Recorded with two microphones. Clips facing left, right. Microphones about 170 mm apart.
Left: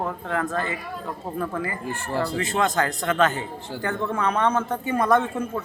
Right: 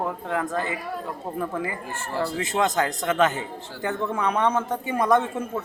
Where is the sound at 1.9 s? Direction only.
15° left (ahead or behind).